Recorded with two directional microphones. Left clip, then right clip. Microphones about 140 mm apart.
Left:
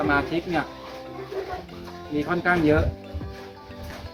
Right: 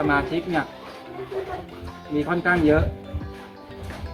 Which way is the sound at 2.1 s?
20° left (ahead or behind).